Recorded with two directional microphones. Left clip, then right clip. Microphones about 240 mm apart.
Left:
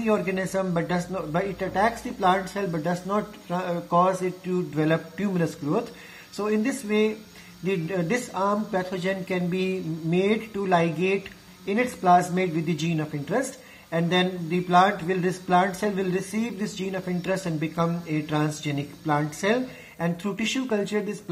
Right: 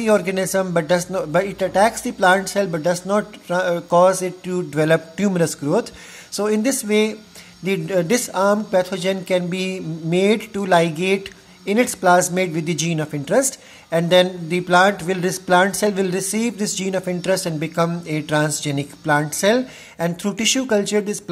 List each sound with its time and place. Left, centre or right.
0.0 s speech: right